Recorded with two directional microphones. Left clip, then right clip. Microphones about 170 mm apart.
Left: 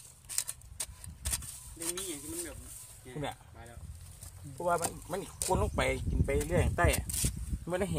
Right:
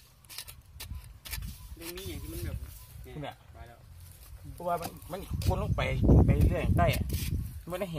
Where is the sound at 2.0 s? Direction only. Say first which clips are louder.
Left 1 dB; 30° left (ahead or behind).